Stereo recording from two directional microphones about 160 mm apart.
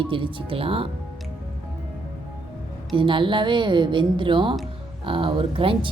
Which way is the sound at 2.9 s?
30° right (ahead or behind).